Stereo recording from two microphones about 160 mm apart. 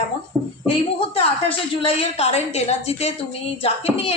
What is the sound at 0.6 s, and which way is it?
Speech, 35° left (ahead or behind).